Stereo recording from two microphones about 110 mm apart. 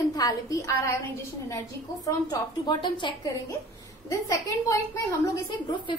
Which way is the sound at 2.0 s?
40° left (ahead or behind).